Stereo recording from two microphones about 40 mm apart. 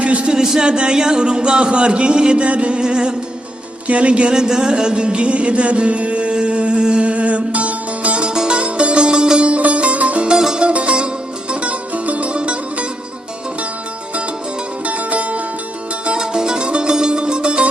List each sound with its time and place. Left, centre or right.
0.0 s speech: right
0.3 s a sound: centre
0.7 s music: right
3.8 s a sound: right
8.3 s music: right
10.2 s music: centre
10.7 s music: right
14.8 s music: right
16.0 s music: centre